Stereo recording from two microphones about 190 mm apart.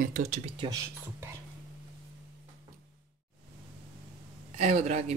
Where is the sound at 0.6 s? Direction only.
25° right (ahead or behind).